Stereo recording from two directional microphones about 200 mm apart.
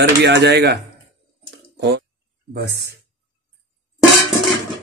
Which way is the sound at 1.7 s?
60° right (ahead or behind).